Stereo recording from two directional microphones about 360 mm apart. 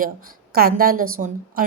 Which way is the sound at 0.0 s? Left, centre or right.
Right.